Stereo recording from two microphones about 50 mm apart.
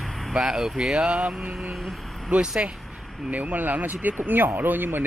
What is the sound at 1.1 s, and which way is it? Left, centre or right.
Speech, right.